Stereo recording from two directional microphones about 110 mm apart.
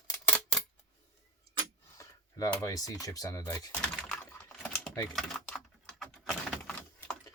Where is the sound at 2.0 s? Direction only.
30° left (ahead or behind).